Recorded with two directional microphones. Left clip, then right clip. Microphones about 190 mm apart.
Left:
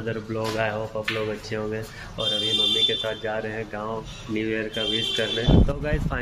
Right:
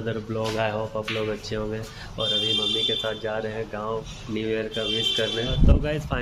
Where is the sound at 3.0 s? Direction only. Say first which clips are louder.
Even; 10° right (ahead or behind).